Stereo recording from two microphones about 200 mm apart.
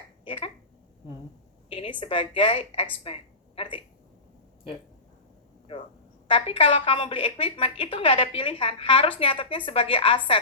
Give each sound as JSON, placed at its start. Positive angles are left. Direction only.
{"t": 0.3, "sound": "speech", "side_deg": 25}
{"t": 1.7, "sound": "a woman's voice", "side_deg": 25}
{"t": 3.0, "sound": "a sound", "side_deg": 30}
{"t": 5.7, "sound": "a woman's voice", "side_deg": 30}